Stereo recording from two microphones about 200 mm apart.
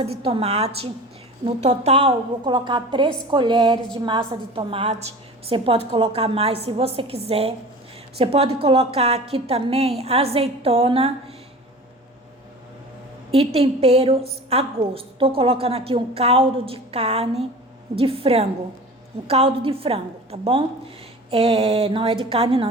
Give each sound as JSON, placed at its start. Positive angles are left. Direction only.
{"t": 0.0, "sound": "a woman's voice", "side_deg": -30}
{"t": 13.3, "sound": "a woman's voice", "side_deg": -30}